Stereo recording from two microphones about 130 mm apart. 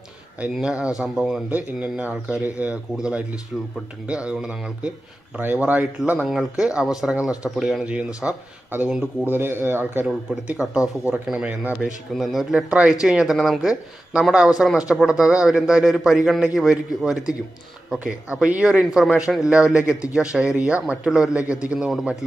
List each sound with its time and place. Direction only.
0.4 s speech: 10° right (ahead or behind)
4.3 s speech: 5° right (ahead or behind)
9.3 s speech: 15° right (ahead or behind)
11.8 s speech: centre (ahead or behind)